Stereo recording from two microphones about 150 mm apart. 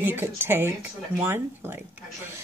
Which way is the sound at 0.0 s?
15° right (ahead or behind).